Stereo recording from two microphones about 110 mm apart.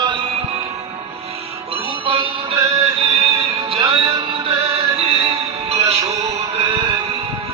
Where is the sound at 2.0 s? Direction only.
60° right (ahead or behind).